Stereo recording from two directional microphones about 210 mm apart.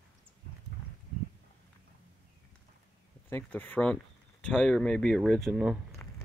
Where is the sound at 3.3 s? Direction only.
10° left (ahead or behind).